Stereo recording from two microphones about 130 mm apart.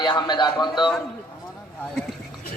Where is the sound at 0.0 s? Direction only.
35° left (ahead or behind).